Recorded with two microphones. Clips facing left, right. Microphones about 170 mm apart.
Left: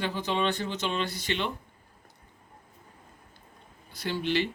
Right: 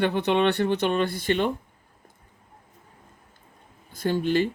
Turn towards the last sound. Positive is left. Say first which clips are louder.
# right 6 dB
turn(degrees=-45)  # may be behind; listen again after turning